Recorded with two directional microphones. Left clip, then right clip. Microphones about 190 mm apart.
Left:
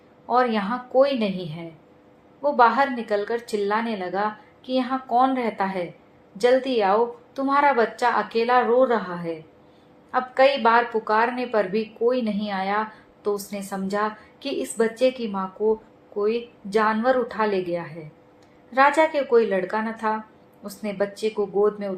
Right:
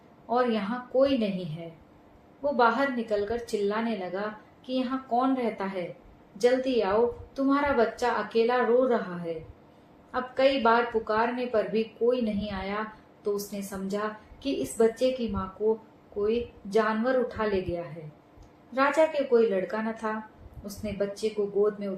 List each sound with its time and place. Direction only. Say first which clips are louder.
0.3 s a woman's voice: left 6 dB; 40° left (ahead or behind)
10.1 s a woman's voice: left 6 dB; 40° left (ahead or behind)